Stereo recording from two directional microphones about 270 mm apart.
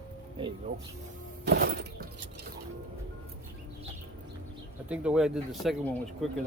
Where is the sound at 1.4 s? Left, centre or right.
Right.